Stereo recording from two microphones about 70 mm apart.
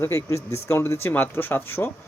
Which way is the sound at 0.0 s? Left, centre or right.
Left.